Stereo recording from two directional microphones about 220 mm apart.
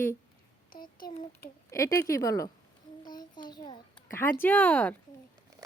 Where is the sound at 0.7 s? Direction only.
40° left (ahead or behind).